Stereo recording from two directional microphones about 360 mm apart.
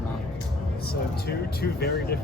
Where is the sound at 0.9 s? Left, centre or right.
Left.